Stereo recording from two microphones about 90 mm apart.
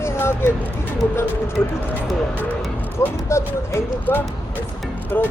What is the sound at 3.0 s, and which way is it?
Speech, 30° left (ahead or behind).